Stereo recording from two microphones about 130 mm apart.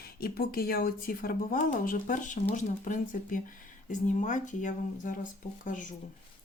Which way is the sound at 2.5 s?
85° left.